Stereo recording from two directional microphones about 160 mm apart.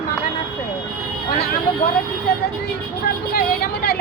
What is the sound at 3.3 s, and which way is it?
Vehicle, 80° left.